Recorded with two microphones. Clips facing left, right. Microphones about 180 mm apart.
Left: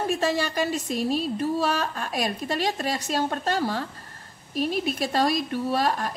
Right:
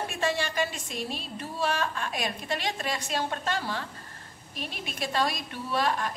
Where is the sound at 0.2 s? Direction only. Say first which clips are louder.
Left 4 dB; 40° left (ahead or behind).